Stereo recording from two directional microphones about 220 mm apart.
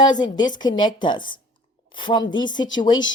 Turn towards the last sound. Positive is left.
turn(degrees=20)  # may be behind; listen again after turning